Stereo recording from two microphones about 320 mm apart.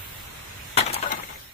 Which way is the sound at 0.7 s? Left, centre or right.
Centre.